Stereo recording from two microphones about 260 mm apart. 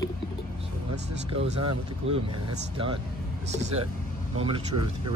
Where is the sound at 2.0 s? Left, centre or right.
Right.